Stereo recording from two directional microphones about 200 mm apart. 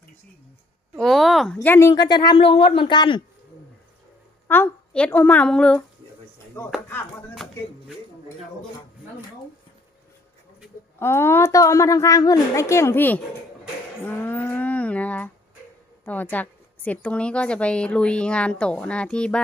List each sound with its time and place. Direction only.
0.9 s a sound: centre (ahead or behind)
1.5 s a woman's voice: 10° left (ahead or behind)
4.4 s a woman's voice: 10° left (ahead or behind)
6.8 s a woman's voice: 10° left (ahead or behind)
11.0 s a woman's voice: 10° left (ahead or behind)
14.0 s a sound: 10° left (ahead or behind)
16.0 s a woman's voice: 10° left (ahead or behind)